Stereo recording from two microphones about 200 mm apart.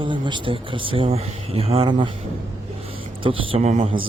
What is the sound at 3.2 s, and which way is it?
Speech, 25° right (ahead or behind).